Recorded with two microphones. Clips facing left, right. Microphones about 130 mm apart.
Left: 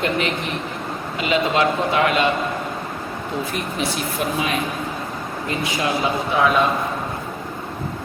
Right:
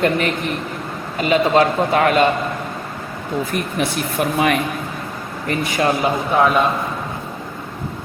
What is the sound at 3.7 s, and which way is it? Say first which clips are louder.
Speech: right 3 dB; 60° right (ahead or behind).